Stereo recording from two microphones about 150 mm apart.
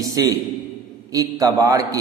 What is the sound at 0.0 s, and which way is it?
A man's voice, 25° right (ahead or behind).